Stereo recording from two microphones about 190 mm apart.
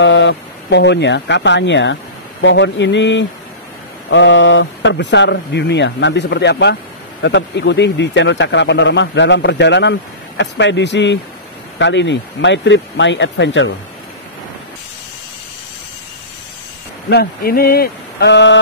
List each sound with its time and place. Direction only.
0.0 s speech: 75° left (ahead or behind)
17.1 s speech: 55° left (ahead or behind); by 18.6 s 70° left (ahead or behind)